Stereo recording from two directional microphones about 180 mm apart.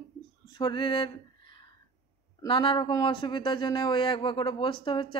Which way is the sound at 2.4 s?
30° left (ahead or behind).